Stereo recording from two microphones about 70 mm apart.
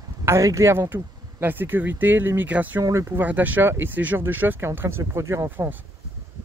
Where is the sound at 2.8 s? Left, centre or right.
Right.